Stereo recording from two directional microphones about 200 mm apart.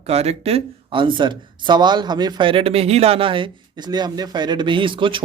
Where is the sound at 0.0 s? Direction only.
30° right (ahead or behind).